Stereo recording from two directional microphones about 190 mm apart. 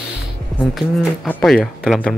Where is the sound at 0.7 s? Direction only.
Centre (ahead or behind).